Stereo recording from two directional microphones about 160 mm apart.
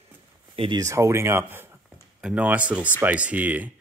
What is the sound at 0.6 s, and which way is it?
Speech, 25° right (ahead or behind).